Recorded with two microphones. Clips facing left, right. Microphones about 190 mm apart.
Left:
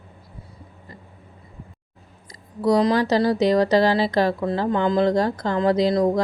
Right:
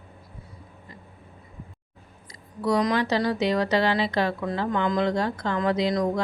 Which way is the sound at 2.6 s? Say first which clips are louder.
Left 5 dB; 35° left (ahead or behind).